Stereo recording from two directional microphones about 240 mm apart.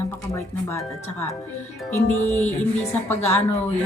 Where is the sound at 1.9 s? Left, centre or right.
Centre.